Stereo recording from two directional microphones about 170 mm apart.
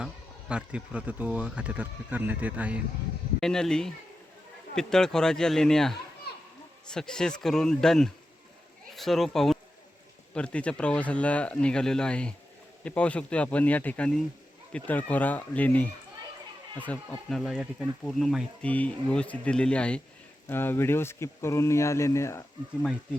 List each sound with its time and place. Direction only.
0.0 s speech: 5° right (ahead or behind)
3.4 s speech: 5° left (ahead or behind)